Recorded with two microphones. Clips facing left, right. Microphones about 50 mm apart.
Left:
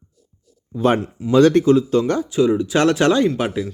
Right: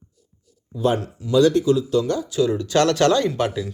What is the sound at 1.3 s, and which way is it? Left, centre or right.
Speech, left.